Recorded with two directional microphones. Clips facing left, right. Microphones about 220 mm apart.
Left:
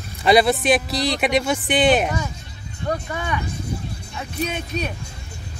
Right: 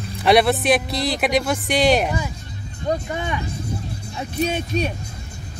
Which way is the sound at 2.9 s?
25° right (ahead or behind).